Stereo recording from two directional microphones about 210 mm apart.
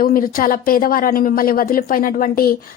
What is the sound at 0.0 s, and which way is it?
A woman's voice, 40° left (ahead or behind).